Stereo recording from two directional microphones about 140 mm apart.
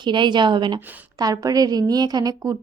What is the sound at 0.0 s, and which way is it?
A woman's voice, 35° right (ahead or behind).